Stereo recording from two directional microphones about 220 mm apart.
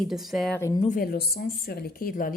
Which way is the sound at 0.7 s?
35° left (ahead or behind).